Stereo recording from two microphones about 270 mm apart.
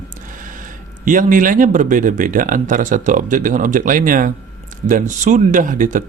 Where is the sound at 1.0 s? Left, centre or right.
Right.